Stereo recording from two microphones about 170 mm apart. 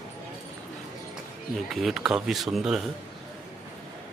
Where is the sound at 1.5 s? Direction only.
Centre (ahead or behind).